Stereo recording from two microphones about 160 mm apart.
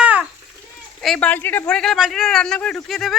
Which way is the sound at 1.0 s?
5° left (ahead or behind).